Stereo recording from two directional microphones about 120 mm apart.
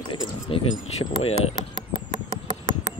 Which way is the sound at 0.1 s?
40° left (ahead or behind).